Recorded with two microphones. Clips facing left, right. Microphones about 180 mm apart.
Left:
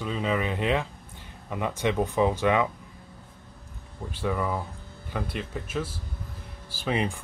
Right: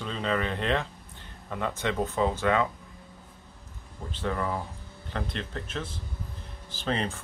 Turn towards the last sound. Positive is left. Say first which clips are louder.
# left 2 dB
turn(degrees=15)  # may be behind; listen again after turning